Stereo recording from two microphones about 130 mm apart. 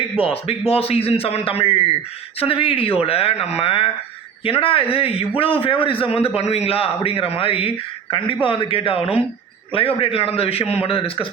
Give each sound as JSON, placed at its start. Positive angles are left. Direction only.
{"t": 0.2, "sound": "a man's voice", "side_deg": 45}